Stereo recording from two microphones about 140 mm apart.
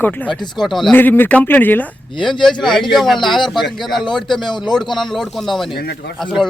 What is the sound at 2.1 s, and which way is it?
Speech, 35° left (ahead or behind).